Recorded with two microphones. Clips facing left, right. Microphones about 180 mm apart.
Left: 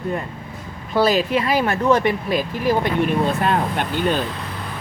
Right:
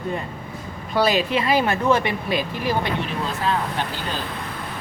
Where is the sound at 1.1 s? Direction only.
45° left (ahead or behind).